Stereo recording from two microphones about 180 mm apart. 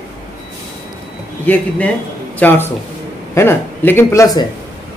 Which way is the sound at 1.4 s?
10° left (ahead or behind).